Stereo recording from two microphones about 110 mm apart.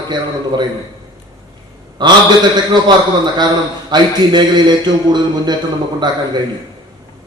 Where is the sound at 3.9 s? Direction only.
40° right (ahead or behind).